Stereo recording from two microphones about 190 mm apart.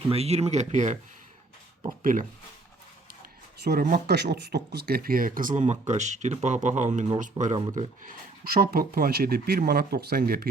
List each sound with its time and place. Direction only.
0.1 s speech: 30° right (ahead or behind)
3.6 s speech: 55° right (ahead or behind)
8.0 s speech: 50° right (ahead or behind)